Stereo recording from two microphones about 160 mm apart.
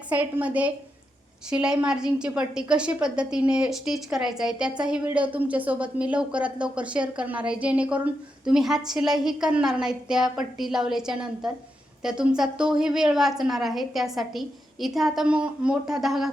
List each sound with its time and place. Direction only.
0.1 s a woman's voice: 10° right (ahead or behind)